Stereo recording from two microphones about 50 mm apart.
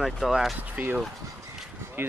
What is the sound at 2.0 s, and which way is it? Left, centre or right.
Speech, right.